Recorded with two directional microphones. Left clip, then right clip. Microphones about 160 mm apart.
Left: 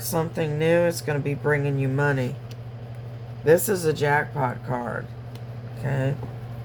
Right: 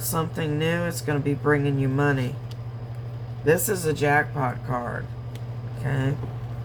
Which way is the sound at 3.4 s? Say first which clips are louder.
Left 3 dB; 40° left (ahead or behind).